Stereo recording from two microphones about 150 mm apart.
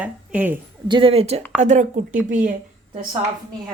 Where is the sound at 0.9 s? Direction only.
35° right (ahead or behind); by 2.5 s 60° right (ahead or behind).